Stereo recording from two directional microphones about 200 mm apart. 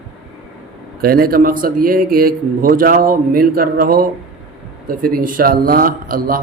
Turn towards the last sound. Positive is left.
turn(degrees=-45)  # may be behind; listen again after turning